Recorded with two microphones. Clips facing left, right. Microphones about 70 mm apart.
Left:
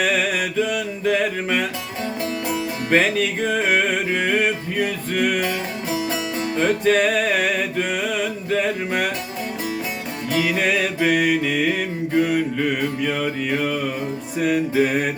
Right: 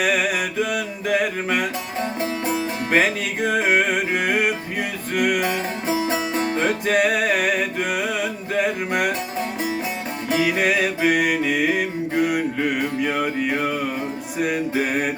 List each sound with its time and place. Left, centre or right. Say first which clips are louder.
0.0 s music: even; centre
2.9 s music: left 2 dB; centre
6.6 s music: left 3 dB; centre
10.3 s music: right 1 dB; centre